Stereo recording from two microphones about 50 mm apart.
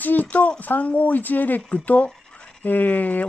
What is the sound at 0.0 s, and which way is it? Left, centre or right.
Speech, left.